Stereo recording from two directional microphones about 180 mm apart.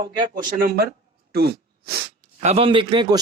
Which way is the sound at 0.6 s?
60° right (ahead or behind).